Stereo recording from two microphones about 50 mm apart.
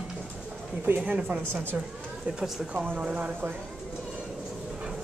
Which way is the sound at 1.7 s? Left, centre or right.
Right.